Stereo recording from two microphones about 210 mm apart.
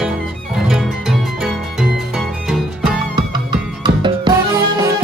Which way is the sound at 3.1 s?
20° right (ahead or behind).